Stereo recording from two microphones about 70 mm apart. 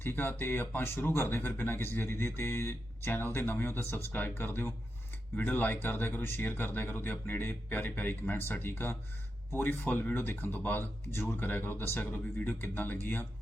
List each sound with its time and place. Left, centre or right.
0.0 s speech: left